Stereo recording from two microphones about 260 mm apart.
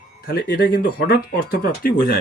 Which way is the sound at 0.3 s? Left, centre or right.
Left.